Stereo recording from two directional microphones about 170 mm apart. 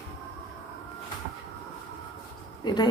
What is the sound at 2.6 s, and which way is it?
Speech, 25° left (ahead or behind).